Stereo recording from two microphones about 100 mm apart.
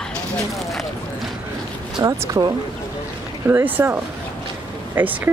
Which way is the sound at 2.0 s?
40° right (ahead or behind).